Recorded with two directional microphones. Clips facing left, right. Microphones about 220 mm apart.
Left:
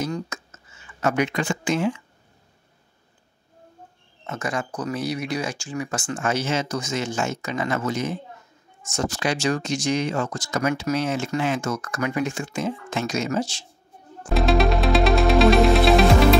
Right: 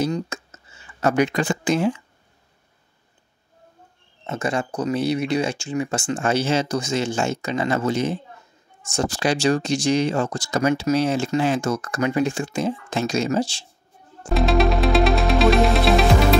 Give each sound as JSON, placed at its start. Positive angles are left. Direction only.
{"t": 0.0, "sound": "a sound", "side_deg": -30}
{"t": 1.0, "sound": "speech", "side_deg": -35}
{"t": 4.3, "sound": "speech", "side_deg": -30}
{"t": 14.3, "sound": "music", "side_deg": 0}